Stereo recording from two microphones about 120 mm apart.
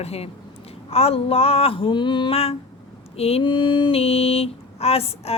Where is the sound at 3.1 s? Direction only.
55° left (ahead or behind).